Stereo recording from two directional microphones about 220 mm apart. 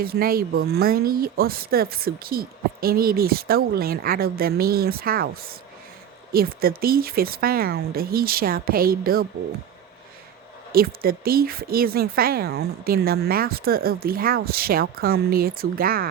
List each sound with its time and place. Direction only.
0.0 s speech: 40° right (ahead or behind)
10.7 s speech: 40° right (ahead or behind)